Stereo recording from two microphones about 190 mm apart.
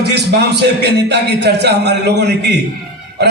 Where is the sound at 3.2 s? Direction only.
60° right (ahead or behind).